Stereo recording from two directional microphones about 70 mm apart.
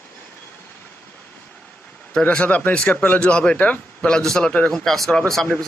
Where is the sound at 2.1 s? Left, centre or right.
Centre.